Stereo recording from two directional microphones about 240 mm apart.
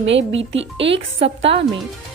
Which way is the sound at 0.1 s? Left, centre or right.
Right.